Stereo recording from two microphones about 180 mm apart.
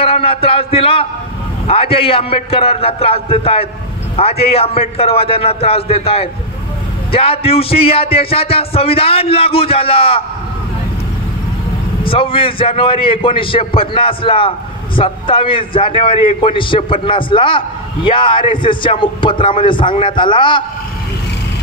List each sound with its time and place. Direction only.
0.0 s a man's voice: 30° left (ahead or behind)
12.0 s a man's voice: 30° left (ahead or behind)